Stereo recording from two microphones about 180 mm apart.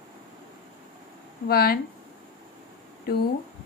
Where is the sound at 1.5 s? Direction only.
60° left (ahead or behind).